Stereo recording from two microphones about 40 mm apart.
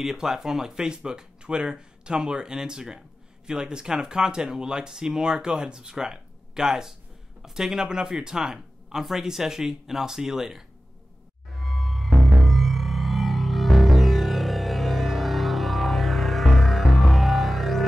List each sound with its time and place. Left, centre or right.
0.0 s speech: centre
11.5 s music: centre